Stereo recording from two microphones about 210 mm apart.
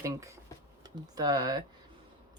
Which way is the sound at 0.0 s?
15° right (ahead or behind).